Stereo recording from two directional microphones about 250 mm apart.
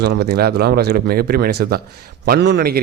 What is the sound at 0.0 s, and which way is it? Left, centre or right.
Speech, right.